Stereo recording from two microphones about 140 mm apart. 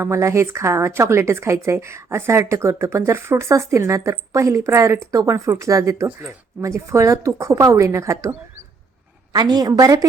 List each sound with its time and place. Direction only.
0.0 s a woman's voice: 20° right (ahead or behind)